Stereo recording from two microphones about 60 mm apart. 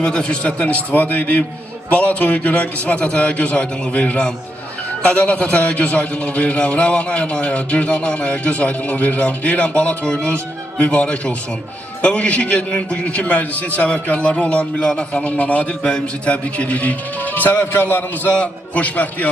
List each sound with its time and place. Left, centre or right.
0.0 s a man's voice: centre